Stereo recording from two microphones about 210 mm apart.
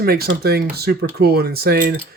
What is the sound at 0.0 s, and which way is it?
Speech, 50° right (ahead or behind).